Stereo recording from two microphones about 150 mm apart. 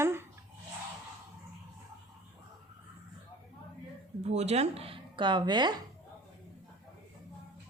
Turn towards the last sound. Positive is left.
turn(degrees=-30)  # may be behind; listen again after turning